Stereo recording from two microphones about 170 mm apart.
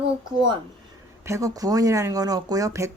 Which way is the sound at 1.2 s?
20° right (ahead or behind).